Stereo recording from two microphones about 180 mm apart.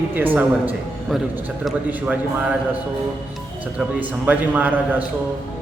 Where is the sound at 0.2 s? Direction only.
10° right (ahead or behind).